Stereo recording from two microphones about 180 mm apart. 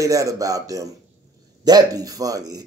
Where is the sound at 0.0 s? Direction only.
20° right (ahead or behind).